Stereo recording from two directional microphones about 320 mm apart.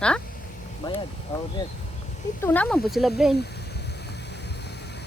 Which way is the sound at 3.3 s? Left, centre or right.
Left.